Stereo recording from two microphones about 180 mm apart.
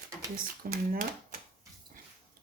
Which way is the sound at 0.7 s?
50° right (ahead or behind).